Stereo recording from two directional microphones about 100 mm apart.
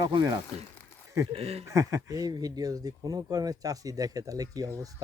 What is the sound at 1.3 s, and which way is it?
Speech, 80° right.